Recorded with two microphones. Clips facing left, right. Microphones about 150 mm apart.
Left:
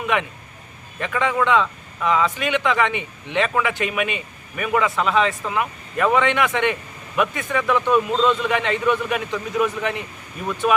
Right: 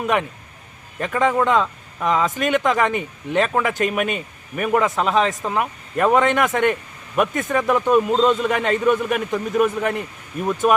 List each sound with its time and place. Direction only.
0.1 s speech: 40° right (ahead or behind)